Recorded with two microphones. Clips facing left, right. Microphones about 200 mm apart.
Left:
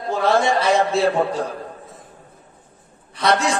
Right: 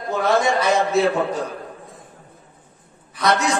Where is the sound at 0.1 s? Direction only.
30° left (ahead or behind).